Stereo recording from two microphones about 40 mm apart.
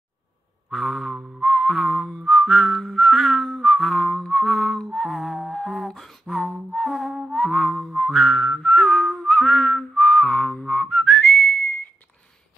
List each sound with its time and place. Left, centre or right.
0.7 s a sound: centre
1.4 s music: centre
2.2 s whistling: centre
6.7 s music: centre
8.0 s whistling: centre; by 11.7 s left